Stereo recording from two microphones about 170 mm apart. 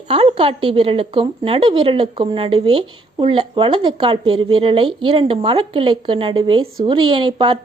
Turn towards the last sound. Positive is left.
turn(degrees=-30)  # may be behind; listen again after turning